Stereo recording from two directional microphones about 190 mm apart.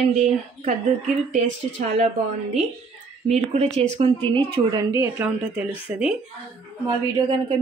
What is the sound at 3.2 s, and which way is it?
Speech, 35° right (ahead or behind).